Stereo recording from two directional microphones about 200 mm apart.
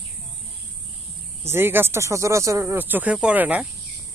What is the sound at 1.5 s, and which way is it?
Speech, 10° right (ahead or behind).